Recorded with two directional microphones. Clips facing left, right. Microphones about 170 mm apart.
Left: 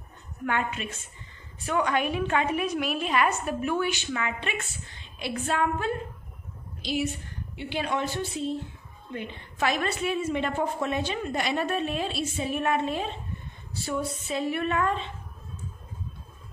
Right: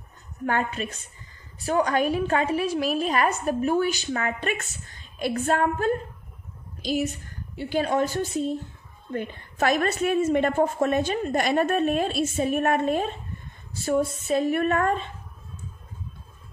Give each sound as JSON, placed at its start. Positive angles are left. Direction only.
{"t": 0.5, "sound": "a woman's voice", "side_deg": -40}